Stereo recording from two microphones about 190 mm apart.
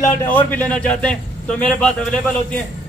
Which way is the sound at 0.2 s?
10° left (ahead or behind).